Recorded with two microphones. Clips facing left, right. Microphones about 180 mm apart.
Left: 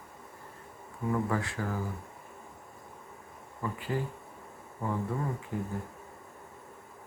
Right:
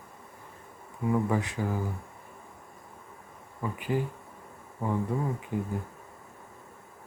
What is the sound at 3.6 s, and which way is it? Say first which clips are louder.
Speech: right 3 dB; 15° right (ahead or behind).